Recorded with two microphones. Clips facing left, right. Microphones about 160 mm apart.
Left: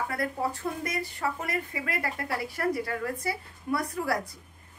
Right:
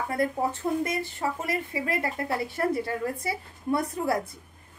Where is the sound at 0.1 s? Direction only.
25° right (ahead or behind).